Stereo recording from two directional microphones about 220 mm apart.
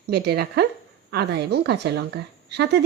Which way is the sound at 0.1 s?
45° right (ahead or behind).